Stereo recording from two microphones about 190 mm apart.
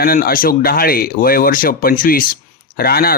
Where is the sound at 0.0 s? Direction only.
55° left (ahead or behind).